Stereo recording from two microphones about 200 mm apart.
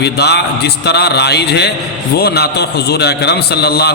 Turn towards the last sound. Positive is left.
turn(degrees=55)  # may be behind; listen again after turning